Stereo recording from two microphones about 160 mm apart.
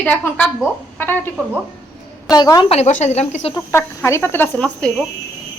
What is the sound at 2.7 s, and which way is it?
Speech, 45° left (ahead or behind).